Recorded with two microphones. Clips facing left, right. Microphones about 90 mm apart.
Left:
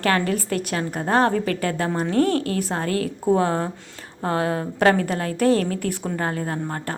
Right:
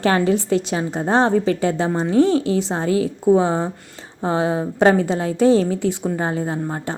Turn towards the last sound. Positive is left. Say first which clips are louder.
# right 3 dB
turn(degrees=-15)  # may be behind; listen again after turning